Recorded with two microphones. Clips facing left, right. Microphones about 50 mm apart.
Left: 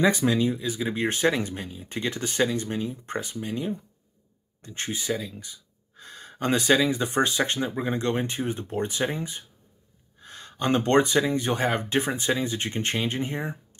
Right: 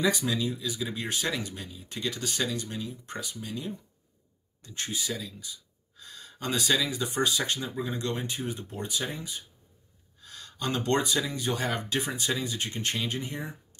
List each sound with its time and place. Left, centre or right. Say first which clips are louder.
0.3 s speech: left 6 dB; left
5.4 s speech: even; left